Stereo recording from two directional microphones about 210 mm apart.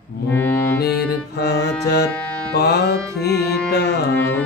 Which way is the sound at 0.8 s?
50° left (ahead or behind).